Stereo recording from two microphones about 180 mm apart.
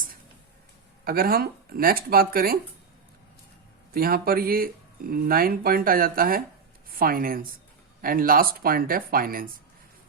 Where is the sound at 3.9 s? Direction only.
55° right (ahead or behind).